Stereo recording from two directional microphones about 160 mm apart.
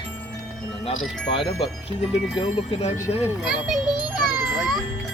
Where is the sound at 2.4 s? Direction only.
40° left (ahead or behind).